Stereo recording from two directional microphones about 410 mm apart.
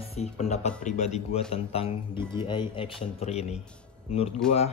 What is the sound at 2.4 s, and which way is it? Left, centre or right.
Speech, centre.